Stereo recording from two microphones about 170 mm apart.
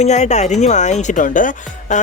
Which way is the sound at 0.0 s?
40° left (ahead or behind).